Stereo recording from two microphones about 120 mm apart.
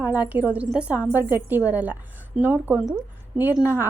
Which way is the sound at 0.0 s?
15° right (ahead or behind).